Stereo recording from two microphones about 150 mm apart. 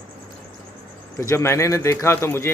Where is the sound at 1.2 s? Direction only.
20° left (ahead or behind).